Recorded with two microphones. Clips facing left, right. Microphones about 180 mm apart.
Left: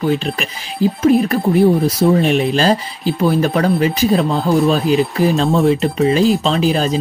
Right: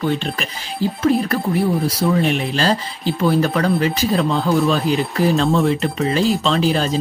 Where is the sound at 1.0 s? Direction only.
20° left (ahead or behind).